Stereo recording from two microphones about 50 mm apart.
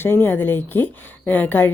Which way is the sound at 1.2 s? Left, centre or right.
Left.